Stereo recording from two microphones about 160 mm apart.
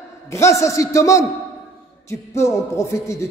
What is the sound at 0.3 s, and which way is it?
A man's voice, 20° left (ahead or behind).